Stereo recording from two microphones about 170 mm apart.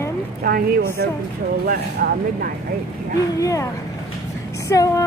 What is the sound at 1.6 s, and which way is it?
Speech, 65° right (ahead or behind).